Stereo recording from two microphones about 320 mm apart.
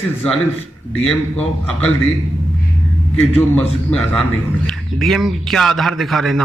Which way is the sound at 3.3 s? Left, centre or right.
Centre.